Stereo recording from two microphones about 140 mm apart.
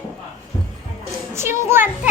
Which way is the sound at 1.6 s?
15° right (ahead or behind).